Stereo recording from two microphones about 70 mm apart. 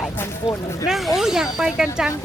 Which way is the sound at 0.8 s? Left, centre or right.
Centre.